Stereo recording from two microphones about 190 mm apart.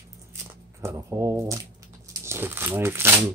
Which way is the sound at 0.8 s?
15° right (ahead or behind).